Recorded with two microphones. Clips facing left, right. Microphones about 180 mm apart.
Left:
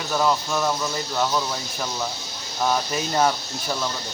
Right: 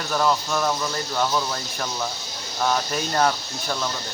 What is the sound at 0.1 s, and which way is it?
Speech, 5° left (ahead or behind).